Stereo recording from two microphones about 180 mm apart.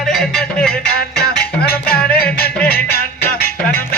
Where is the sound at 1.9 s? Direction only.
5° left (ahead or behind).